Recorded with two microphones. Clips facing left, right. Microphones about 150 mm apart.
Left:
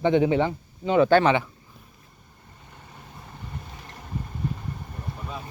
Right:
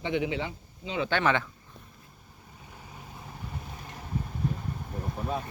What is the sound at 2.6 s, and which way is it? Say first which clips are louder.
Vehicle: even; 5° right (ahead or behind).